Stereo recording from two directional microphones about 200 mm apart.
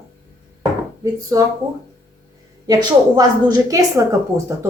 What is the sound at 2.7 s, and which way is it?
A woman's voice, 20° right (ahead or behind).